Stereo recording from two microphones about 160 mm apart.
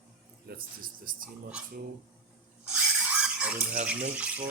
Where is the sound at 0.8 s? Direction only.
60° right (ahead or behind).